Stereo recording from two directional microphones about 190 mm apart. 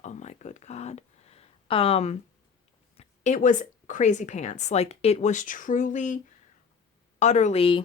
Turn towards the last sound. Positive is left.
turn(degrees=30)  # may be behind; listen again after turning